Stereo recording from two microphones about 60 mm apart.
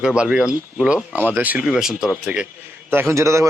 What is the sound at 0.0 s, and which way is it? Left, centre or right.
Speech, centre.